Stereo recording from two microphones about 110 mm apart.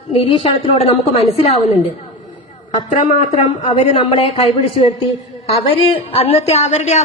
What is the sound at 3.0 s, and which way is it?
Speech, 90° left.